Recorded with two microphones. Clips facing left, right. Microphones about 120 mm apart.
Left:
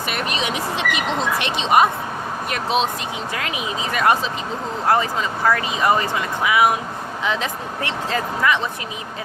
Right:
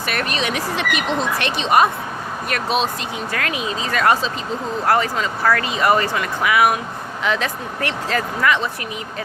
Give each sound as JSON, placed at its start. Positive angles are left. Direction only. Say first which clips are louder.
{"t": 0.1, "sound": "speech", "louder": "right 2 dB", "side_deg": 20}